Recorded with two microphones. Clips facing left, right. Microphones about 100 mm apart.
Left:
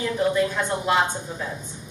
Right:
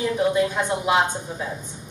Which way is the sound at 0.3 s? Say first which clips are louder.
Right 1 dB; 15° right (ahead or behind).